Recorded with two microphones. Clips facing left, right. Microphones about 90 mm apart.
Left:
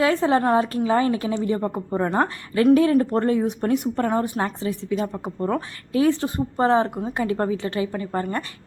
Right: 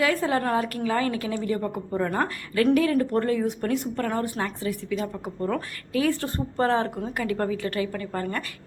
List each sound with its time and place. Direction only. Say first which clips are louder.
0.0 s a woman's voice: left 5 dB; 25° left (ahead or behind)